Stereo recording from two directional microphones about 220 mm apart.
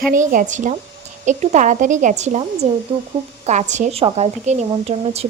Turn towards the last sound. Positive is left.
turn(degrees=-30)  # may be behind; listen again after turning